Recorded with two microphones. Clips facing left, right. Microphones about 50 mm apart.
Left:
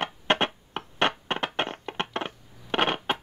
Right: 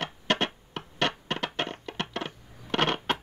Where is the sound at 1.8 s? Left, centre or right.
Left.